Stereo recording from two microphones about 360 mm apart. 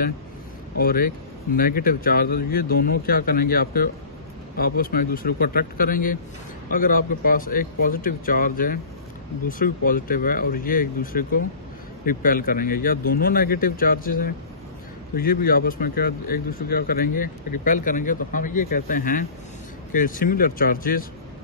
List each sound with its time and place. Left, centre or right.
0.7 s speech: left